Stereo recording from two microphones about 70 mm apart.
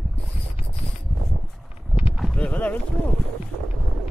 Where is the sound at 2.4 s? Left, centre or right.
Left.